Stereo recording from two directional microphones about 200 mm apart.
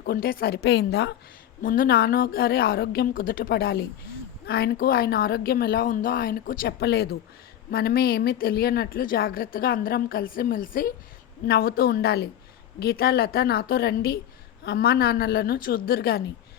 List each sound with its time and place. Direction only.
0.0 s a woman's voice: 50° left (ahead or behind)
1.6 s a woman's voice: 45° left (ahead or behind)